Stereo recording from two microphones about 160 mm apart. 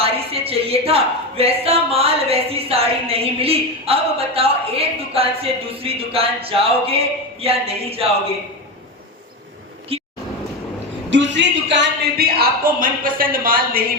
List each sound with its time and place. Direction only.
0.0 s speech: 35° right (ahead or behind)
9.9 s vehicle: 35° right (ahead or behind)
11.3 s speech: 90° right; by 13.8 s 65° right (ahead or behind)